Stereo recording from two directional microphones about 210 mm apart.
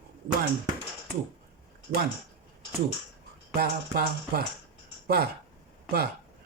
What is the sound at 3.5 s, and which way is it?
Speech, 45° right (ahead or behind).